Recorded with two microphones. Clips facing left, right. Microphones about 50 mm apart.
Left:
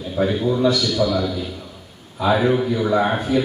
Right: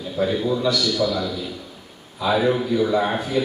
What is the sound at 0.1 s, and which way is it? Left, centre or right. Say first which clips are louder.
A man's voice: left 2 dB; left.